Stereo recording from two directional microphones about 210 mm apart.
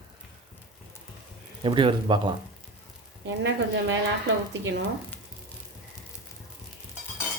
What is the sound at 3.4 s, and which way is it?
Speech, 60° right (ahead or behind).